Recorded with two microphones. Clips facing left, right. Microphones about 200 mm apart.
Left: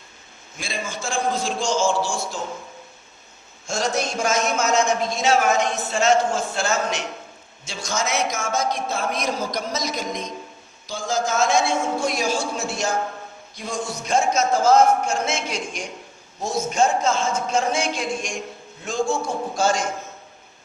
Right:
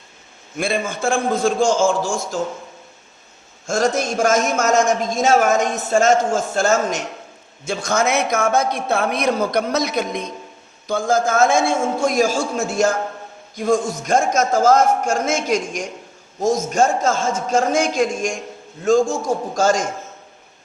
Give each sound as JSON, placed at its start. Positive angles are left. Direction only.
{"t": 0.6, "sound": "a man's voice", "side_deg": -55}
{"t": 3.7, "sound": "a man's voice", "side_deg": -50}